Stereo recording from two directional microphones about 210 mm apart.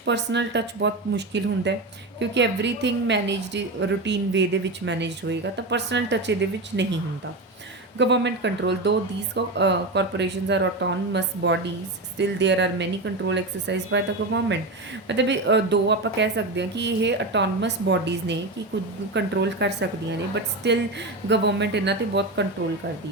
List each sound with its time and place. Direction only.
0.0 s speech: 55° right (ahead or behind)
7.9 s speech: 55° right (ahead or behind)
15.0 s speech: 60° right (ahead or behind)